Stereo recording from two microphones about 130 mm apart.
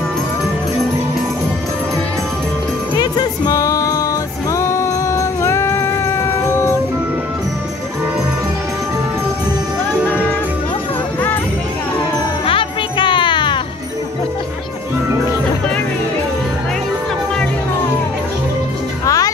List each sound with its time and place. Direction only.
3.0 s music: 30° left (ahead or behind)
12.4 s music: 40° left (ahead or behind)
19.0 s music: 25° left (ahead or behind)